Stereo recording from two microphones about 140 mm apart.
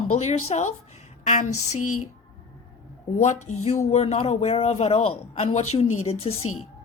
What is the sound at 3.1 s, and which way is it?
Speech, 55° left (ahead or behind).